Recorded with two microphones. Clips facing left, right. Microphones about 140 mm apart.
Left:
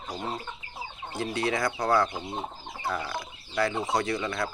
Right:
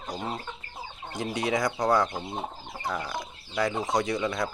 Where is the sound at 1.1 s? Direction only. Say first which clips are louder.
Right 1 dB; 20° right (ahead or behind).